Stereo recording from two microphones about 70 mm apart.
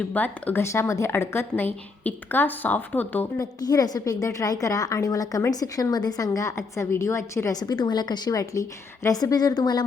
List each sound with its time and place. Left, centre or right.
0.1 s a woman's voice: left
0.6 s a woman's voice: left
3.7 s a woman's voice: left
7.5 s a woman's voice: left